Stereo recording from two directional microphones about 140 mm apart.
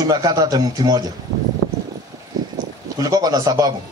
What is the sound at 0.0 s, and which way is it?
A man's voice, 25° right (ahead or behind).